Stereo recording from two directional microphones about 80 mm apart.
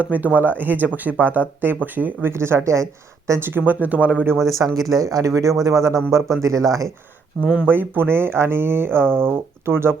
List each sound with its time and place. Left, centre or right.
0.0 s speech: right
3.4 s speech: right
4.4 s speech: right
7.6 s speech: right